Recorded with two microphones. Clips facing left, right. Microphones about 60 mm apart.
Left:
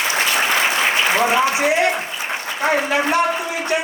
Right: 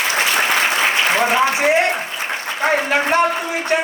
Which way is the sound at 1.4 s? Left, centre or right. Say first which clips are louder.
Right 1 dB; right.